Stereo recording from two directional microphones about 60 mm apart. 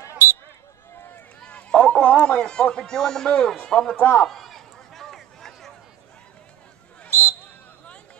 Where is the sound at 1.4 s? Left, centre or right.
Centre.